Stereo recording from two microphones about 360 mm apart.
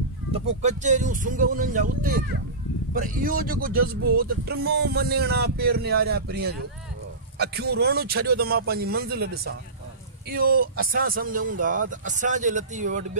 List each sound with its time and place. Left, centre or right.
0.3 s speech: centre